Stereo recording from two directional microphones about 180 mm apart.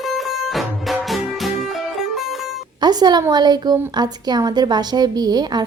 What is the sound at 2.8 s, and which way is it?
A woman's voice, 25° right (ahead or behind).